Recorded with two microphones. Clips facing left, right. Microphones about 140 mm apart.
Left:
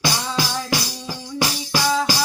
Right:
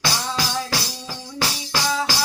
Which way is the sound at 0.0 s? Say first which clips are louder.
Left 2 dB; 15° left (ahead or behind).